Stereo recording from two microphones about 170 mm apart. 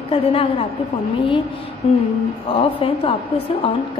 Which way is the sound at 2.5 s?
35° left (ahead or behind).